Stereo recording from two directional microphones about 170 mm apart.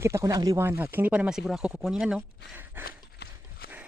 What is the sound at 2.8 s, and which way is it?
Horse, 65° left (ahead or behind).